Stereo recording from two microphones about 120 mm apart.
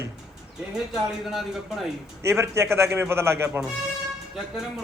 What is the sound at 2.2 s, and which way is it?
A man's voice, 25° right (ahead or behind).